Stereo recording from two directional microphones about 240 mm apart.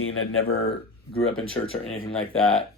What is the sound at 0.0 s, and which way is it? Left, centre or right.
Speech, left.